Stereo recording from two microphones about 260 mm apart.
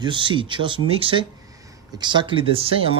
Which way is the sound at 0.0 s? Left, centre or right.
Centre.